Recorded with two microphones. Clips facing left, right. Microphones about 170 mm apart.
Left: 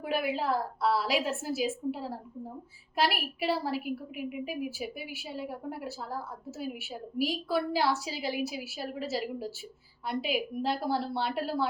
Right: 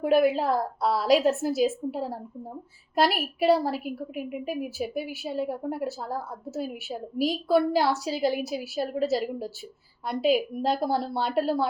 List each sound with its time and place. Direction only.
0.0 s a woman's voice: 40° right (ahead or behind)